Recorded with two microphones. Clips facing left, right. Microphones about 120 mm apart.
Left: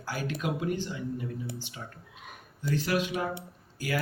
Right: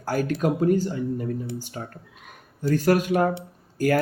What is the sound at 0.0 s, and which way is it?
Speech, 45° right (ahead or behind).